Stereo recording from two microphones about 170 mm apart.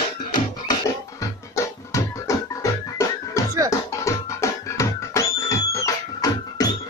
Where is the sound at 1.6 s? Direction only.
15° left (ahead or behind).